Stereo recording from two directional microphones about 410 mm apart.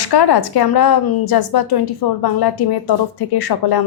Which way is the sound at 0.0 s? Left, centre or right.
Left.